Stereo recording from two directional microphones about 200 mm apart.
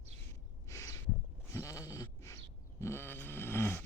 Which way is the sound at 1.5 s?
15° left (ahead or behind).